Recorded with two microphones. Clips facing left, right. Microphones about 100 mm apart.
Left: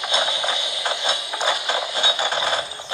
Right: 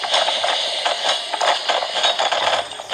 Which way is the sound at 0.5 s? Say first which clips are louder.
Right 4 dB; 15° left (ahead or behind).